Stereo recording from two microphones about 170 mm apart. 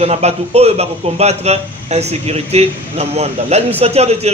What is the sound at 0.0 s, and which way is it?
A man's voice, 40° right (ahead or behind).